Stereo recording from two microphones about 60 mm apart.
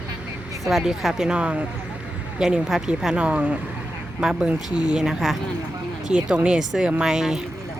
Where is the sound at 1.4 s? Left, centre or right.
Right.